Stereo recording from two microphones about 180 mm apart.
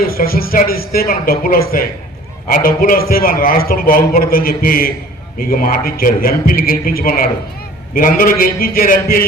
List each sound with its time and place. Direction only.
0.1 s a man's voice: 55° left (ahead or behind)